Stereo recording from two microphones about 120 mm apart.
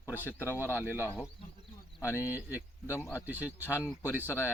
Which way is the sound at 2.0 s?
20° left (ahead or behind).